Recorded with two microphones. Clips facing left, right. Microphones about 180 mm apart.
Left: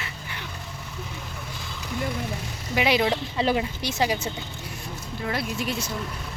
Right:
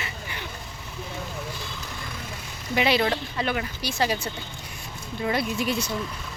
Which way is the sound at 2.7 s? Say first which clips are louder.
Even; 10° left (ahead or behind).